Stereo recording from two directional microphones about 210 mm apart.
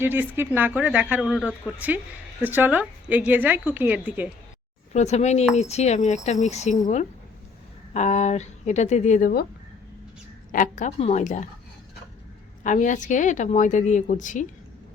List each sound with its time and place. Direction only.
0.0 s a woman's voice: 10° right (ahead or behind)
4.9 s a woman's voice: 30° left (ahead or behind)
10.5 s a woman's voice: 35° left (ahead or behind)
12.6 s a woman's voice: 35° left (ahead or behind)